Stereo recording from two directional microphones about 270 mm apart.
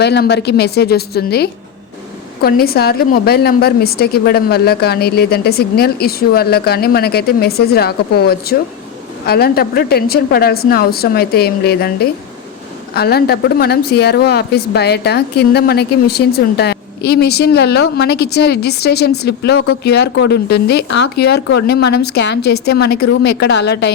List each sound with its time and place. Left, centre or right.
0.0 s a woman's voice: left